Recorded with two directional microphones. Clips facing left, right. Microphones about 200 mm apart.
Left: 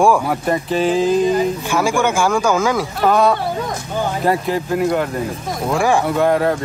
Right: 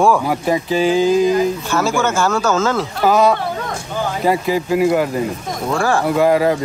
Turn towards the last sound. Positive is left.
turn(degrees=-5)  # may be behind; listen again after turning